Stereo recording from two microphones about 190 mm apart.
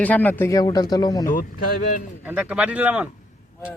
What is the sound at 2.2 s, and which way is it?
Speech, 10° right (ahead or behind).